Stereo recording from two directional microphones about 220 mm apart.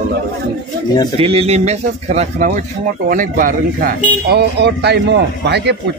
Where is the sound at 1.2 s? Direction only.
25° right (ahead or behind).